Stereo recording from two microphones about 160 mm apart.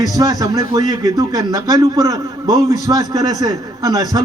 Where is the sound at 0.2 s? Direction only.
20° right (ahead or behind).